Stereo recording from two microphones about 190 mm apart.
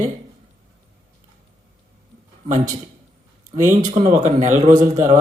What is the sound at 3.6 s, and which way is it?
Speech, 40° right (ahead or behind).